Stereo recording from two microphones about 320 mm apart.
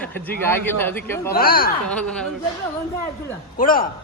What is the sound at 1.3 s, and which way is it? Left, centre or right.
Speech, left.